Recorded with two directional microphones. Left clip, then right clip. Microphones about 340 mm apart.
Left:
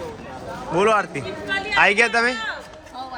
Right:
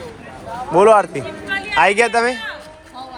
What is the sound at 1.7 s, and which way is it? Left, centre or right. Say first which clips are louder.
Speech: right 3 dB; centre.